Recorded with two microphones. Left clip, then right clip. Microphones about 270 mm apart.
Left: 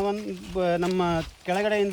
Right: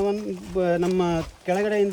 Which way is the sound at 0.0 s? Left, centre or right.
Centre.